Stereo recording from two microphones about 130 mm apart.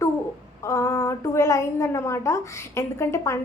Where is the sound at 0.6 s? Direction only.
25° left (ahead or behind).